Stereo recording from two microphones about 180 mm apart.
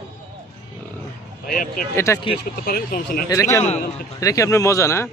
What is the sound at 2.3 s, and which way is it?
Speech, 60° left (ahead or behind).